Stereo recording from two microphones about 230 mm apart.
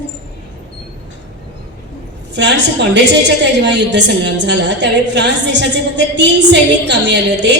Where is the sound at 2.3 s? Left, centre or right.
Right.